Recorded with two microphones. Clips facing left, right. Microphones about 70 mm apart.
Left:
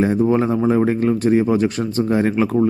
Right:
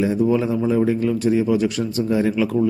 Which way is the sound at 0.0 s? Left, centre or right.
Left.